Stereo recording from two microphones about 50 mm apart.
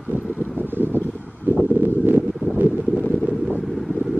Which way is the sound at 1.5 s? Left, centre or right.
Right.